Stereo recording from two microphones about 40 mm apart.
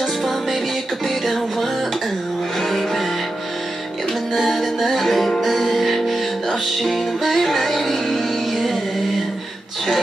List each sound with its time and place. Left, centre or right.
0.0 s music: centre
4.3 s music: centre